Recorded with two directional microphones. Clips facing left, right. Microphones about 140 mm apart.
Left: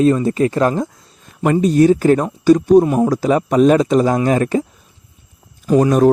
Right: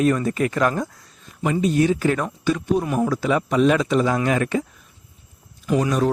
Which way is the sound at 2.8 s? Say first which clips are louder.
Left 6 dB; 30° left (ahead or behind).